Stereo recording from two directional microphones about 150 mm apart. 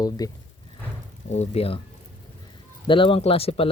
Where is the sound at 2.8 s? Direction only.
35° left (ahead or behind).